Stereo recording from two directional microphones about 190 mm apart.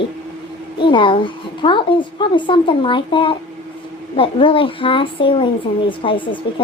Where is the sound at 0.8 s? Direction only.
25° left (ahead or behind).